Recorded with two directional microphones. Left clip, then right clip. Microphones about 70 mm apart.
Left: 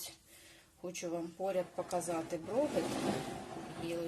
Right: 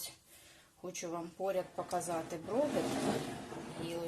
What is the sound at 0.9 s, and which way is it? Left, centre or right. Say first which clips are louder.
Speech: left 1 dB; left.